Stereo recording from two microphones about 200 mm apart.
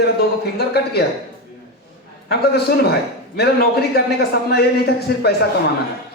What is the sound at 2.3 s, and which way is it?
Speech, 55° left (ahead or behind).